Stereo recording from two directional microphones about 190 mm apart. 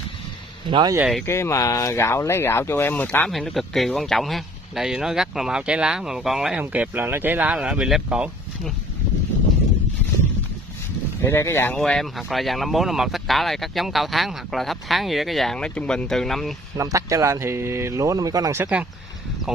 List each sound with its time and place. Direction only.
0.7 s speech: 25° right (ahead or behind)
0.9 s speech: 5° right (ahead or behind)
1.2 s speech: 15° left (ahead or behind); by 8.7 s 5° right (ahead or behind)
11.2 s speech: 10° left (ahead or behind)
16.7 s speech: 15° right (ahead or behind)